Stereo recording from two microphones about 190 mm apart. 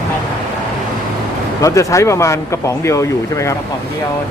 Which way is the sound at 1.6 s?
15° left (ahead or behind).